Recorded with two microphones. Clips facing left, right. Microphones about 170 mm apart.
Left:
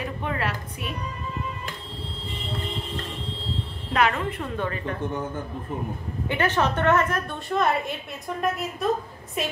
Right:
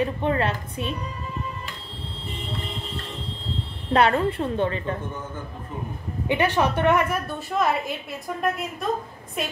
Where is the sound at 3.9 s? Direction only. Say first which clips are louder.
Right 4 dB; 35° right (ahead or behind).